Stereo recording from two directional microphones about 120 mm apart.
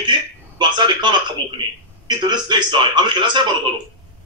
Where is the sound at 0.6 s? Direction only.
40° right (ahead or behind).